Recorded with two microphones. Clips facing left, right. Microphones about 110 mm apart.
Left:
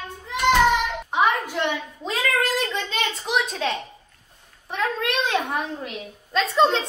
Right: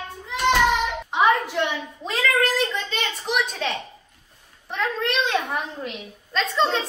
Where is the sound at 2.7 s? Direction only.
Centre (ahead or behind).